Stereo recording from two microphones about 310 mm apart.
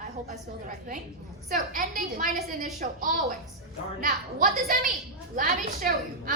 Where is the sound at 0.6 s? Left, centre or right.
Right.